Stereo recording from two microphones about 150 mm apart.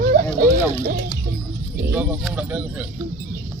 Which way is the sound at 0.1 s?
65° right (ahead or behind).